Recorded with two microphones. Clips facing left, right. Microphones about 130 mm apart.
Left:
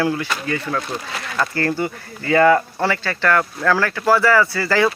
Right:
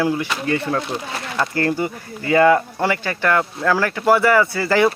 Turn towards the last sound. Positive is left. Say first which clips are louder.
# right 1 dB
turn(degrees=-20)  # may be behind; listen again after turning